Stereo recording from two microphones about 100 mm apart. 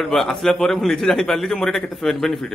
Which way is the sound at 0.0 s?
5° left (ahead or behind).